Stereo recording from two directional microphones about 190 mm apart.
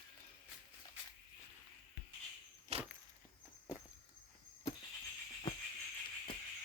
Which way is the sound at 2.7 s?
35° right (ahead or behind).